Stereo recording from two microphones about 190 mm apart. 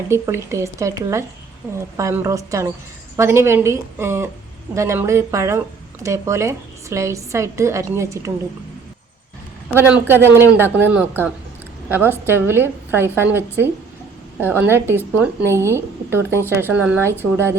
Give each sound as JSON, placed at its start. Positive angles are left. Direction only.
{"t": 0.1, "sound": "speech", "side_deg": -15}
{"t": 9.7, "sound": "a woman's voice", "side_deg": -10}